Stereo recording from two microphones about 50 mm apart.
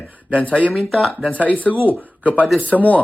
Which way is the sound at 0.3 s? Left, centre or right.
Left.